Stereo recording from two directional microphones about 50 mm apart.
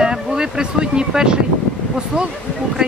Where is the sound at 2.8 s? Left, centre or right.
Centre.